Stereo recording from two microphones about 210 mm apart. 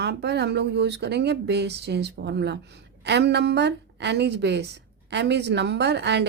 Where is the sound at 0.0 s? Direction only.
50° right (ahead or behind).